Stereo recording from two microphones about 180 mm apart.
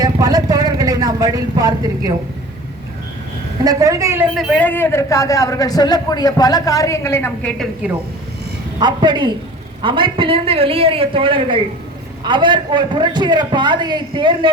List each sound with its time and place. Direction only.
0.0 s a sound: 20° right (ahead or behind)
3.6 s a man's voice: 20° right (ahead or behind)
4.4 s a man's voice: 5° left (ahead or behind)
7.6 s speech: 5° right (ahead or behind)
8.8 s a man's voice: 25° right (ahead or behind)